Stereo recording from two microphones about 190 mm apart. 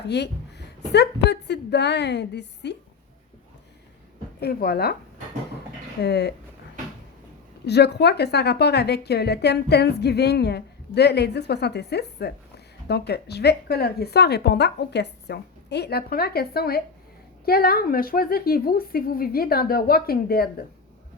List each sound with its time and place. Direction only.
0.1 s a woman's voice: 60° left (ahead or behind)
4.4 s a woman's voice: 55° left (ahead or behind)
6.0 s a woman's voice: 60° left (ahead or behind)
7.6 s a woman's voice: 60° left (ahead or behind)